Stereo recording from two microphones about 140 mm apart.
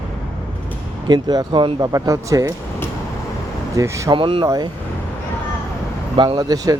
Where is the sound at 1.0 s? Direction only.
30° right (ahead or behind).